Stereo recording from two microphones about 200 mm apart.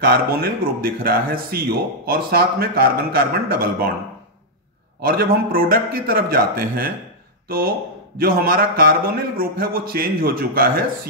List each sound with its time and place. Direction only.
0.0 s a man's voice: 50° right (ahead or behind)
5.0 s a man's voice: 50° right (ahead or behind)